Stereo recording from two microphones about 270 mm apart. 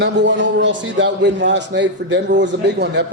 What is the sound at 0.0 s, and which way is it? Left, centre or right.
A man's voice, right.